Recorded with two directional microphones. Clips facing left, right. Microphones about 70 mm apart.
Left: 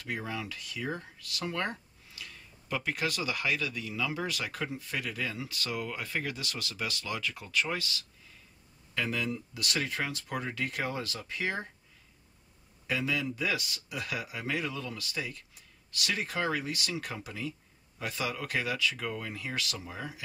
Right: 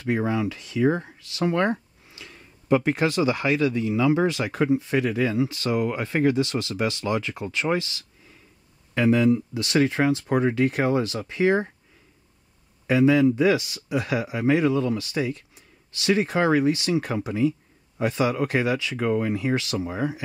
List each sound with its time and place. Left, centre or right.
0.0 s speech: right
12.8 s speech: right